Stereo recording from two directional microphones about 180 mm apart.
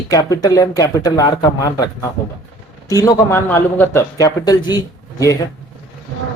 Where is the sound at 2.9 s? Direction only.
20° left (ahead or behind).